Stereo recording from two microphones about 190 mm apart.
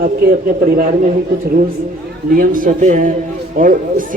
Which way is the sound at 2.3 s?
45° right (ahead or behind).